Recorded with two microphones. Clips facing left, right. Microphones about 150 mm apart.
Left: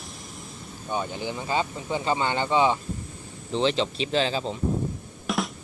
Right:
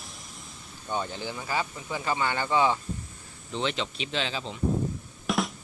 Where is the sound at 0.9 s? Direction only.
15° left (ahead or behind).